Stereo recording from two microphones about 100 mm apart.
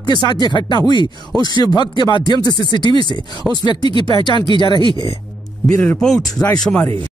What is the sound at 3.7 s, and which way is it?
Speech, 60° right (ahead or behind).